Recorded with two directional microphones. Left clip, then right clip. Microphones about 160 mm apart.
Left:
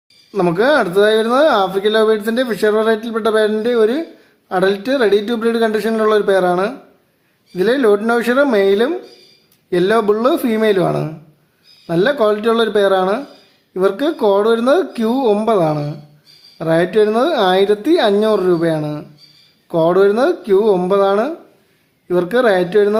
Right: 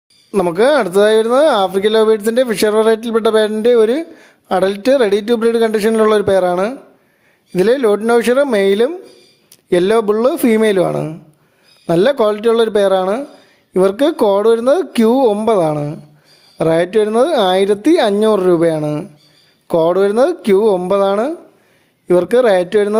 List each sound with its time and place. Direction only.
0.3 s speech: 45° right (ahead or behind)